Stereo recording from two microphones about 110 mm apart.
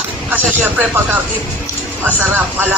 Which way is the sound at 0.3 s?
15° right (ahead or behind).